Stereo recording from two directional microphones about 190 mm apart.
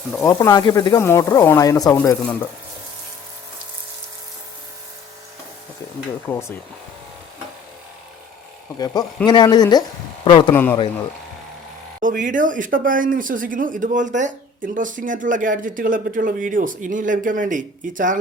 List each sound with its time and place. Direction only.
0.3 s speech: 20° left (ahead or behind)
6.3 s speech: 10° left (ahead or behind)
8.8 s speech: 20° left (ahead or behind)
10.5 s speech: 10° left (ahead or behind)
12.0 s speech: 45° right (ahead or behind)